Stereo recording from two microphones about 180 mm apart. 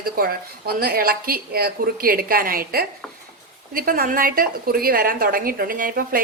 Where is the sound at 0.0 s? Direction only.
55° right (ahead or behind).